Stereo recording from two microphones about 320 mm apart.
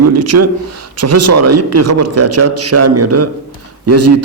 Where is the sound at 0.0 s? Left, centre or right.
Right.